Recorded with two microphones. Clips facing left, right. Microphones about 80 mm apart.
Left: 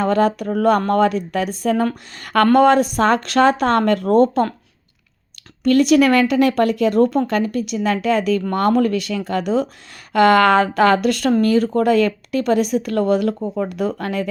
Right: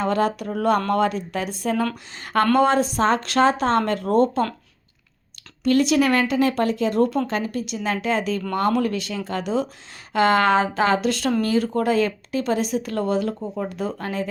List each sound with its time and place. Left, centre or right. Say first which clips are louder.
0.0 s speech: left 5 dB; left
2.1 s speech: left 5 dB; left
5.6 s speech: left 5 dB; left
10.1 s speech: left 5 dB; left